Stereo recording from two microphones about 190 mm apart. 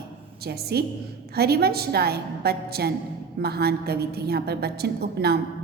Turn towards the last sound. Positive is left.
turn(degrees=-55)  # may be behind; listen again after turning